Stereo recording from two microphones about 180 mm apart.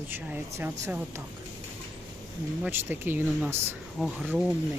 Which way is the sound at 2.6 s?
10° right (ahead or behind).